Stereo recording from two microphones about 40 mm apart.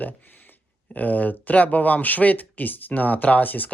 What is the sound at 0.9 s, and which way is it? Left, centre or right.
Speech, left.